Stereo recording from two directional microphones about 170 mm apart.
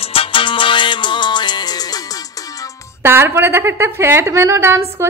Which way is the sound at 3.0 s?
15° right (ahead or behind).